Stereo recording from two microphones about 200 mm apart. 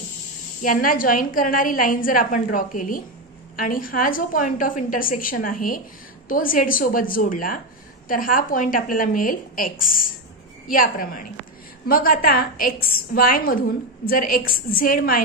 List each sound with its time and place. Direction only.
0.6 s a woman's voice: 45° left (ahead or behind)